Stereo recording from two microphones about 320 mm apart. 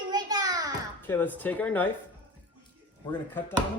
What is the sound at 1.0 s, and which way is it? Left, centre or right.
Speech, centre.